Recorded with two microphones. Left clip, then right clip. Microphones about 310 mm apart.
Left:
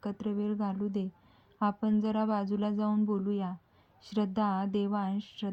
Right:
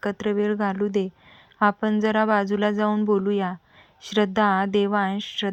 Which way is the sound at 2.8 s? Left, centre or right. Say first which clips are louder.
Right 11 dB; right.